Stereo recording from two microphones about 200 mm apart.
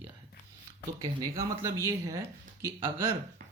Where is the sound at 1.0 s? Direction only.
15° right (ahead or behind).